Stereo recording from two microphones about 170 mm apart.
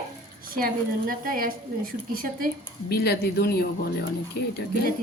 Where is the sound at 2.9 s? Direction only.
70° left (ahead or behind).